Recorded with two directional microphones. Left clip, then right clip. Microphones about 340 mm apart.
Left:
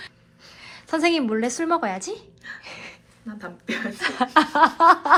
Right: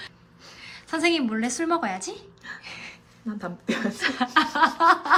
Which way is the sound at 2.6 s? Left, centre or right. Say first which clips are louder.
Left 1 dB; centre.